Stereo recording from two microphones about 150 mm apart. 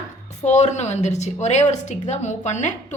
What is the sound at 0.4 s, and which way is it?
Speech, 50° left (ahead or behind).